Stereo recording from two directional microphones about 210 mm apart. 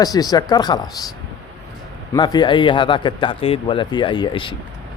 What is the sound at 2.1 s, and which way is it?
Speech, 20° left (ahead or behind).